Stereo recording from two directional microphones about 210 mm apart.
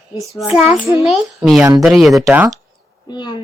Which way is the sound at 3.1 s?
20° left (ahead or behind).